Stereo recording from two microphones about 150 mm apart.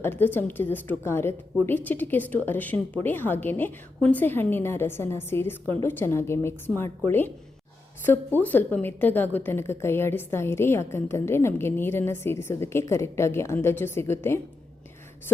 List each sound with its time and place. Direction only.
0.0 s a woman's voice: 15° left (ahead or behind)